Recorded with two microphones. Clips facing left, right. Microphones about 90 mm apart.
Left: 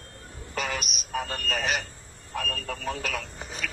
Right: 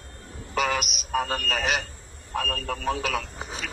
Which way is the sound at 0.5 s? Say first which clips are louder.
Right 6 dB; 40° right (ahead or behind).